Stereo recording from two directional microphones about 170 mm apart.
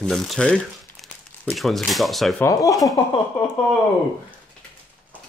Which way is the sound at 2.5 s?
20° left (ahead or behind).